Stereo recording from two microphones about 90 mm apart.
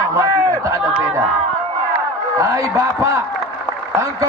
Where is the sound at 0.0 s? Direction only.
35° right (ahead or behind).